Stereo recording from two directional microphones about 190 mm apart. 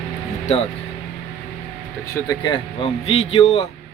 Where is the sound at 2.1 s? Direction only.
20° left (ahead or behind).